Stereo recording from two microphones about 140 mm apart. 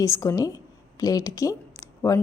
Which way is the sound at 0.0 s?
25° left (ahead or behind).